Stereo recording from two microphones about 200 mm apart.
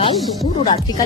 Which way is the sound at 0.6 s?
20° left (ahead or behind).